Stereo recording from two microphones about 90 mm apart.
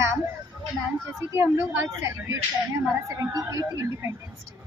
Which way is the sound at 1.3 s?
25° right (ahead or behind).